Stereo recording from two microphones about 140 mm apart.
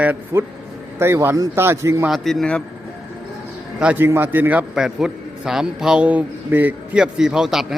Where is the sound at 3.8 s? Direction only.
10° right (ahead or behind).